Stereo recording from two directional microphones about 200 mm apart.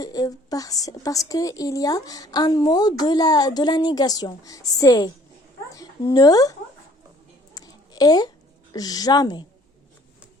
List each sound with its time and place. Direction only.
0.0 s a woman's voice: 20° left (ahead or behind)
7.5 s a sound: 20° left (ahead or behind)
8.7 s a woman's voice: 20° left (ahead or behind)